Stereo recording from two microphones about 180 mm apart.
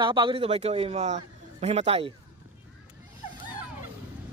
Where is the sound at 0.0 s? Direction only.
25° right (ahead or behind).